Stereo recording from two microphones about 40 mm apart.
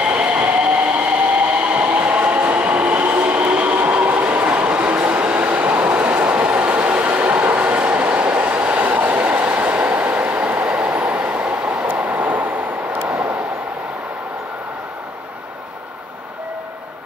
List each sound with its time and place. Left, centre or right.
0.0 s train: right
13.1 s vehicle: right